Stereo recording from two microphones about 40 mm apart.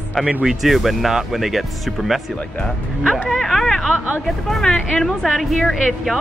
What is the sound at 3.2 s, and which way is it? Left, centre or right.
Vehicle, centre.